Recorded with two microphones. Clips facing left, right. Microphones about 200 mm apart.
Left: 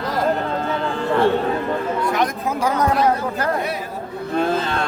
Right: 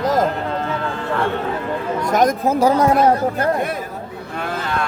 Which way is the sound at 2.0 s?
45° right (ahead or behind).